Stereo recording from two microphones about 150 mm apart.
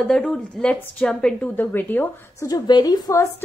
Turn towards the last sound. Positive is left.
turn(degrees=25)  # may be behind; listen again after turning